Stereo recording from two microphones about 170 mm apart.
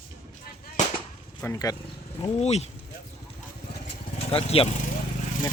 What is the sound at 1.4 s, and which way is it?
Speech, 20° left (ahead or behind).